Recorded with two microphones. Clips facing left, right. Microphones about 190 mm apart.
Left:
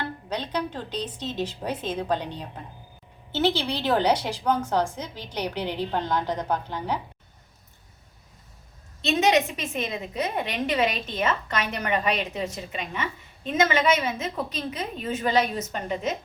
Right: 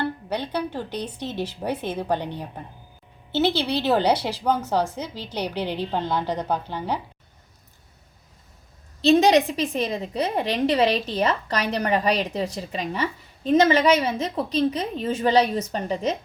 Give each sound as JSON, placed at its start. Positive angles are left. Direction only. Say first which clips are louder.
{"t": 0.3, "sound": "a woman's voice", "louder": "right 2 dB", "side_deg": -10}
{"t": 9.0, "sound": "a woman's voice", "louder": "right 5 dB", "side_deg": -35}